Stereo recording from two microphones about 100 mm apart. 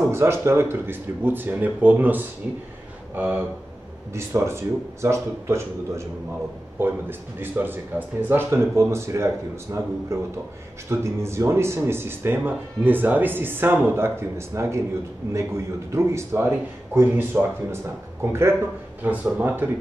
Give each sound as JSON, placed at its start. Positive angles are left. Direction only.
{"t": 0.1, "sound": "speech", "side_deg": -25}
{"t": 19.0, "sound": "speech", "side_deg": -15}